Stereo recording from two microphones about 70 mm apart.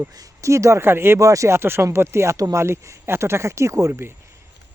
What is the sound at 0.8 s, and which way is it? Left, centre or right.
Speech, right.